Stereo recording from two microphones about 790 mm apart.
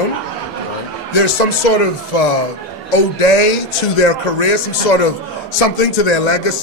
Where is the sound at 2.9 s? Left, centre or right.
Left.